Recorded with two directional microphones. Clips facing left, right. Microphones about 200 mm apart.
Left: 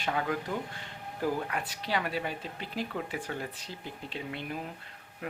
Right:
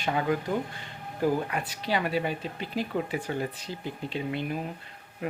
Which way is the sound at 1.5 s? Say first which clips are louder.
Right 3 dB; 5° right (ahead or behind).